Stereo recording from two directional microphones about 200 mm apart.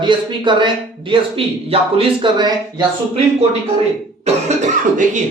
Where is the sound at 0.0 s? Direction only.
25° right (ahead or behind).